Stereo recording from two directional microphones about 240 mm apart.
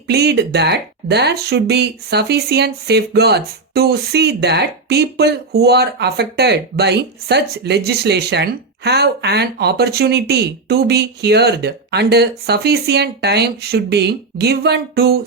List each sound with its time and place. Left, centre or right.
0.1 s speech: right